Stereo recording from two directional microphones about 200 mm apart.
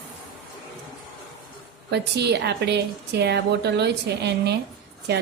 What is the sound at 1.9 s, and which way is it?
A woman's voice, 55° right (ahead or behind).